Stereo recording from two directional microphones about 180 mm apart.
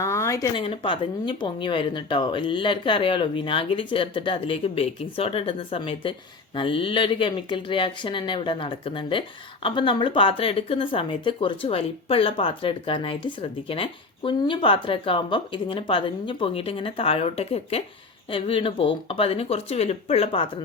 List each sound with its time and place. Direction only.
0.0 s speech: 15° left (ahead or behind)
0.6 s speech: 30° left (ahead or behind)